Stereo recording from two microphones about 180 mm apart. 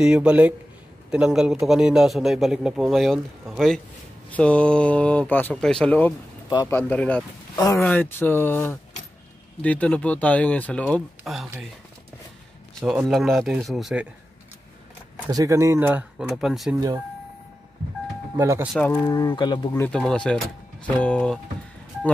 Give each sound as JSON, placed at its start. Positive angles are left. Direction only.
{"t": 0.0, "sound": "a man's voice", "side_deg": -5}
{"t": 7.5, "sound": "speech", "side_deg": 20}
{"t": 12.8, "sound": "a man's voice", "side_deg": 0}
{"t": 15.2, "sound": "speech", "side_deg": -15}
{"t": 18.3, "sound": "speech", "side_deg": -15}
{"t": 18.7, "sound": "speech", "side_deg": 10}
{"t": 19.0, "sound": "speech", "side_deg": 20}
{"t": 19.7, "sound": "a man's voice", "side_deg": 5}